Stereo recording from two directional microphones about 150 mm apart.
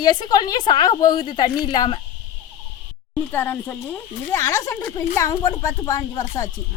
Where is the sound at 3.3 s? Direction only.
15° left (ahead or behind).